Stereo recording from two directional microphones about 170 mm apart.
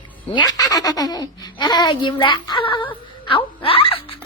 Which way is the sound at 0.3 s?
20° left (ahead or behind).